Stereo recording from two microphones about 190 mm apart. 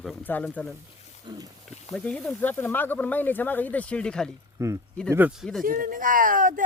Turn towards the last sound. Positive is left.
turn(degrees=-45)  # may be behind; listen again after turning